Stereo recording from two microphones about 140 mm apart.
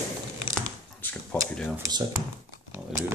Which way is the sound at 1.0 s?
10° left (ahead or behind).